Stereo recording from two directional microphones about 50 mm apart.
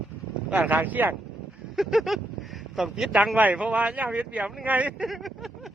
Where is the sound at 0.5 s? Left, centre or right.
Right.